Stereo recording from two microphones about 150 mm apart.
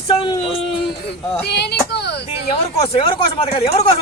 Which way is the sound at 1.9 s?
90° left.